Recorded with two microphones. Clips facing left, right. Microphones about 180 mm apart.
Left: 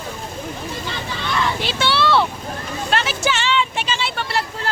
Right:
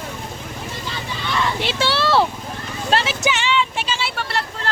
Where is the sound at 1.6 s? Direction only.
35° right (ahead or behind).